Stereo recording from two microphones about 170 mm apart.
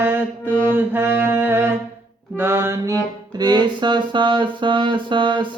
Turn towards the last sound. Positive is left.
turn(degrees=-30)  # may be behind; listen again after turning